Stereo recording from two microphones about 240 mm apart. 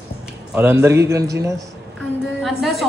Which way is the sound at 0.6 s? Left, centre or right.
Centre.